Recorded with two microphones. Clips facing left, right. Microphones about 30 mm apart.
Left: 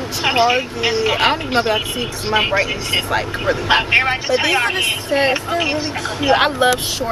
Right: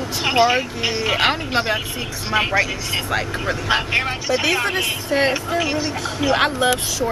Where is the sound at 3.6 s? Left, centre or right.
Left; by 5.3 s centre.